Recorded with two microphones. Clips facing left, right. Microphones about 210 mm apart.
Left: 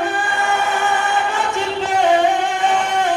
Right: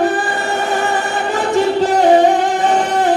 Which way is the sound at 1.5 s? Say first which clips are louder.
Right 9 dB; 35° right (ahead or behind).